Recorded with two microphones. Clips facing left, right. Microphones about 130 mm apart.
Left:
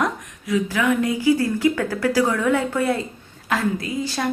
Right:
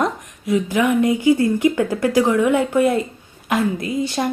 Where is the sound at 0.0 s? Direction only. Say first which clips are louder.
Right 2 dB; 25° right (ahead or behind).